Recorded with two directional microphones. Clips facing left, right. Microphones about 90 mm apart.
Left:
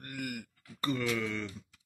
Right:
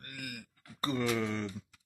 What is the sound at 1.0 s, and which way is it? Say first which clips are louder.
Wail: right 1 dB; 30° right (ahead or behind).